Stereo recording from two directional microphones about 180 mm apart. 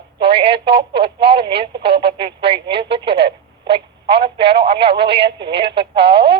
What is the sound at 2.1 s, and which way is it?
Speech, 30° right (ahead or behind).